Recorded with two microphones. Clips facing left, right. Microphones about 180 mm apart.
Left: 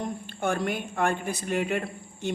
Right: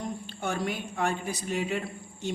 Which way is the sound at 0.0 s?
50° left (ahead or behind).